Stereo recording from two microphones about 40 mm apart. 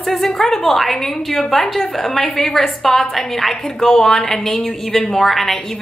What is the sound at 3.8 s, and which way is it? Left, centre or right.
Speech, centre.